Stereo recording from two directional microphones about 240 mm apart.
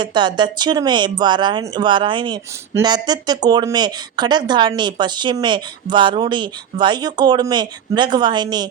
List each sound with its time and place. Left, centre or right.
0.0 s speech: centre